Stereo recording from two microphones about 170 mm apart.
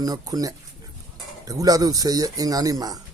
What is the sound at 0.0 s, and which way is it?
Speech, 20° right (ahead or behind).